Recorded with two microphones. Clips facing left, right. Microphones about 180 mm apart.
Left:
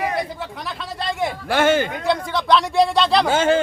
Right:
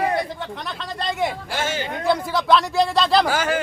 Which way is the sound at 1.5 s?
60° left (ahead or behind).